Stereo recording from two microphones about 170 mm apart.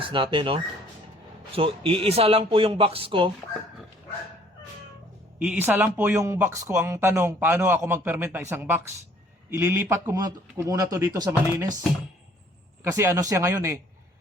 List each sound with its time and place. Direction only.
0.0 s speech: 30° right (ahead or behind)
5.4 s speech: 10° right (ahead or behind)
12.8 s speech: 15° right (ahead or behind)